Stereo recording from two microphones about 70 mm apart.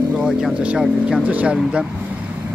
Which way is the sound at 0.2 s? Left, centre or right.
Centre.